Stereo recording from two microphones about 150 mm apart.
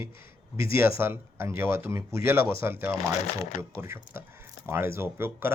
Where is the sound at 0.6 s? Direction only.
80° left.